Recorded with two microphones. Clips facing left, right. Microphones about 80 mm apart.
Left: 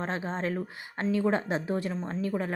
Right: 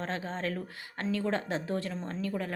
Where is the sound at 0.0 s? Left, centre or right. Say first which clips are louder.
Left 3 dB; left.